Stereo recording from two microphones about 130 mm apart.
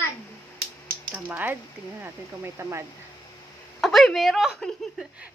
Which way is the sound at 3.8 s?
Centre (ahead or behind).